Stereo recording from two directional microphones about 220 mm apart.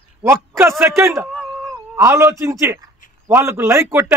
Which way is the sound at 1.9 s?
10° right (ahead or behind).